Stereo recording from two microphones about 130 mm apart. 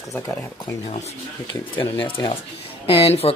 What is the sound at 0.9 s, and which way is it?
Speech, 55° left (ahead or behind).